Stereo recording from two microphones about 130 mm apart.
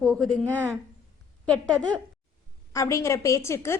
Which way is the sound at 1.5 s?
5° left (ahead or behind).